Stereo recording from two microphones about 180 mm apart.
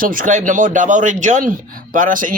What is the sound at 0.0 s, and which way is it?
A man's voice, 50° right (ahead or behind).